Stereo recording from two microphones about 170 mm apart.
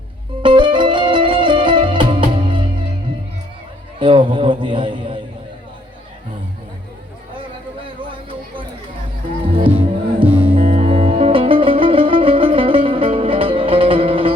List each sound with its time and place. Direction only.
0.4 s music: 30° right (ahead or behind)
4.0 s a man's voice: 30° right (ahead or behind)
9.6 s music: 30° right (ahead or behind)